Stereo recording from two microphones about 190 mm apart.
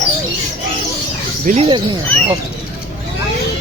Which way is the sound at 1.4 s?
40° right (ahead or behind).